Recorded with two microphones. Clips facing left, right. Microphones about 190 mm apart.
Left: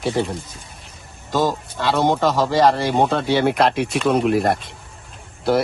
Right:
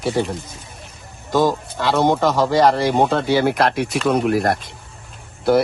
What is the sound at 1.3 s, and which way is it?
A man's voice, 10° right (ahead or behind).